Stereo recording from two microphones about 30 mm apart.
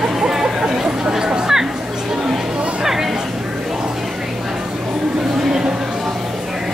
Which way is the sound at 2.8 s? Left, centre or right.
Centre.